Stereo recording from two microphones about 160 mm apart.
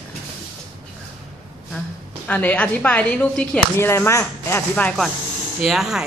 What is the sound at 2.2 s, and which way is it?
Speech, 10° left (ahead or behind).